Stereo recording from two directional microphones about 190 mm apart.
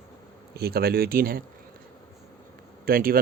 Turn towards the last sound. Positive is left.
turn(degrees=-50)  # may be behind; listen again after turning